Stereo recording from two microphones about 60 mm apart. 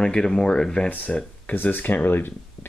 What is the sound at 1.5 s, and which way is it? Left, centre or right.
Speech, left.